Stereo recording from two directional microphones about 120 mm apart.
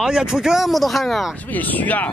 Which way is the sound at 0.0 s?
5° right (ahead or behind).